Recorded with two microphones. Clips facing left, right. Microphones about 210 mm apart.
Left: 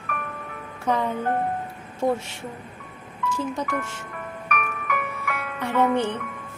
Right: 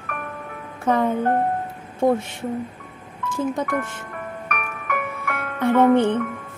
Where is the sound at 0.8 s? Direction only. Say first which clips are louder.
Right 4 dB; 50° right (ahead or behind).